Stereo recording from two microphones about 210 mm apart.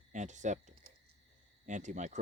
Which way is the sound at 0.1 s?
35° right (ahead or behind).